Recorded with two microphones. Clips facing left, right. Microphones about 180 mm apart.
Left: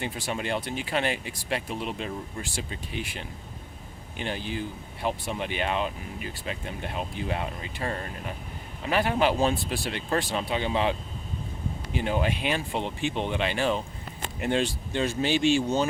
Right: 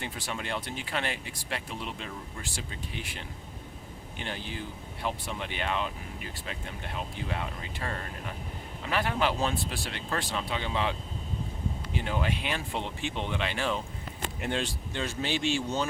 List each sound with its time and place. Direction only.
0.0 s speech: 15° left (ahead or behind)
5.0 s speech: 15° left (ahead or behind)
7.3 s speech: 20° left (ahead or behind)
10.1 s speech: 25° left (ahead or behind)
10.5 s speech: 15° left (ahead or behind)
11.9 s speech: 20° left (ahead or behind)
13.6 s speech: 30° left (ahead or behind)
14.4 s speech: 10° left (ahead or behind)